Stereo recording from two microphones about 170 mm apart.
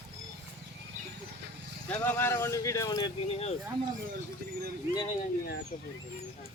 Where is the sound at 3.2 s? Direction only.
35° left (ahead or behind).